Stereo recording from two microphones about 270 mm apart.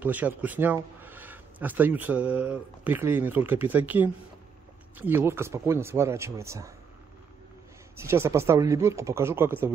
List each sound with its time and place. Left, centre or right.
0.0 s speech: centre
8.0 s speech: centre